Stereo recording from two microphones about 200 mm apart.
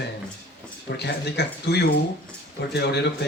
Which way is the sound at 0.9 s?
55° left (ahead or behind).